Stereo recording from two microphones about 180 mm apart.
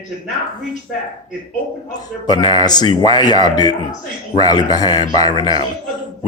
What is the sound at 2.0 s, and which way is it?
A man's voice, 25° left (ahead or behind).